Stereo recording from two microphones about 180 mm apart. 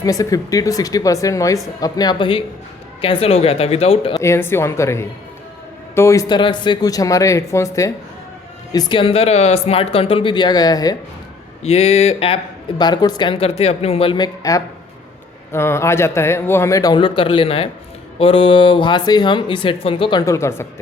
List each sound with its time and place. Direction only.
0.0 s speech: 20° left (ahead or behind)
4.1 s a man's voice: 15° left (ahead or behind)
8.7 s speech: 30° left (ahead or behind)
11.6 s speech: 35° left (ahead or behind)
12.8 s a man's voice: 25° left (ahead or behind)